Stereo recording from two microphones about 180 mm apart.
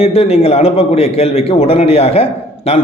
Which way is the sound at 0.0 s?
35° left (ahead or behind).